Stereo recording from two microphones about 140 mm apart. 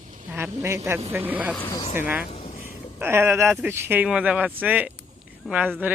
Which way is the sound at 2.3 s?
50° left (ahead or behind).